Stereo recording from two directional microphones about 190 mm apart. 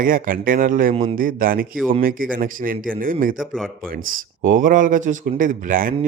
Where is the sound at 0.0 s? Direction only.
50° right (ahead or behind).